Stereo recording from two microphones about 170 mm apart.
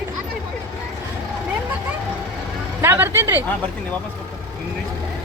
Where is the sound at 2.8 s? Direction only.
15° right (ahead or behind).